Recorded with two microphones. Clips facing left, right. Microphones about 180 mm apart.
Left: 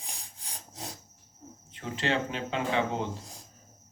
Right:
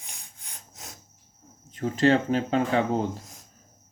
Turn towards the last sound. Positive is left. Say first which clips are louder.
# right 5 dB
turn(degrees=-40)  # may be behind; listen again after turning